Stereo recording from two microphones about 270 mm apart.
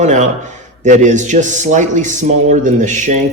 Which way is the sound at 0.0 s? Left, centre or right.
Right.